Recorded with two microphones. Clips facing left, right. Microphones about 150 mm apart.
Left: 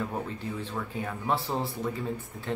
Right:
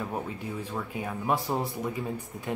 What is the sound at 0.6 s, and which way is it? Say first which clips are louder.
Speech: even; 10° right (ahead or behind).